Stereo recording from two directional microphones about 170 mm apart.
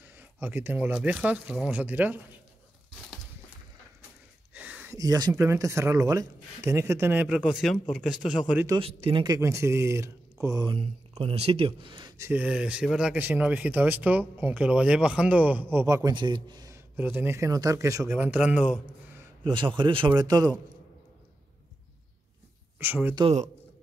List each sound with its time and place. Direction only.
0.0 s a sound: 10° right (ahead or behind)
0.9 s speech: 5° right (ahead or behind)
4.6 s a sound: 10° right (ahead or behind)
4.9 s speech: 20° right (ahead or behind); by 8.6 s 5° right (ahead or behind)
8.8 s speech: 30° right (ahead or behind)
12.2 s speech: 10° right (ahead or behind)
19.4 s a man's voice: 25° right (ahead or behind)
22.8 s speech: 10° right (ahead or behind)